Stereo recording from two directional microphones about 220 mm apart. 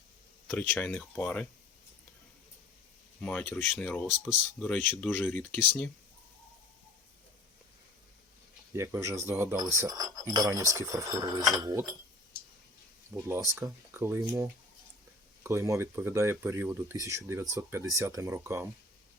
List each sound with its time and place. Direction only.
0.4 s speech: 5° left (ahead or behind)
3.2 s speech: 5° left (ahead or behind)
8.7 s speech: 10° right (ahead or behind)
13.1 s speech: 10° right (ahead or behind)